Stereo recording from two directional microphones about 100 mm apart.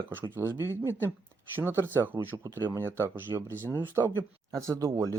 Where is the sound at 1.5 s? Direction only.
25° right (ahead or behind).